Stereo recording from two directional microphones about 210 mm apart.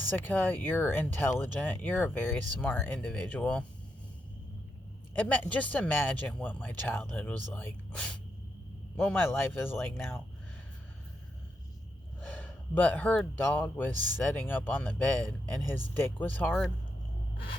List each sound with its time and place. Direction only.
0.2 s speech: 10° left (ahead or behind)
5.1 s speech: 10° left (ahead or behind)
12.3 s speech: 10° left (ahead or behind)